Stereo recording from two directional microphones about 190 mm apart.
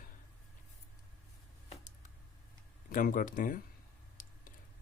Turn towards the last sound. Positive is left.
turn(degrees=45)  # may be behind; listen again after turning